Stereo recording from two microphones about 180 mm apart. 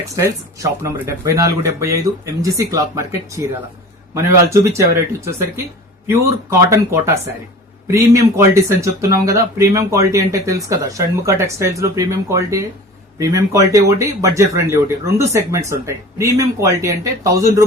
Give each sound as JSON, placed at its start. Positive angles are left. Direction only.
{"t": 0.2, "sound": "speech", "side_deg": -15}